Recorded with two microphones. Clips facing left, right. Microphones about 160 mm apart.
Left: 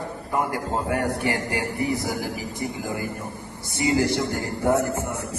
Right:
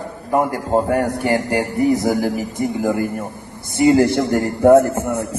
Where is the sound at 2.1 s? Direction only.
60° right (ahead or behind).